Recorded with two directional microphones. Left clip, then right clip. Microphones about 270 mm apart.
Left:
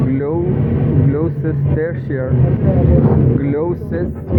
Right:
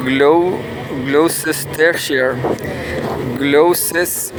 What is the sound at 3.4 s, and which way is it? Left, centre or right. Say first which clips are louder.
Speech: right 7 dB; right.